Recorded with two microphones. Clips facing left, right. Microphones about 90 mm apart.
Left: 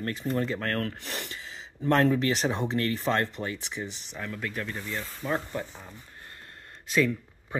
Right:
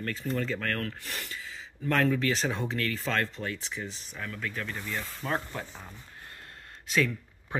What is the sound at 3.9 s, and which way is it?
Speech, 75° left (ahead or behind).